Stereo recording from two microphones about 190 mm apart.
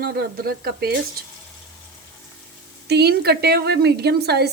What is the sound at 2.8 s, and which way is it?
A woman's voice, 60° right (ahead or behind).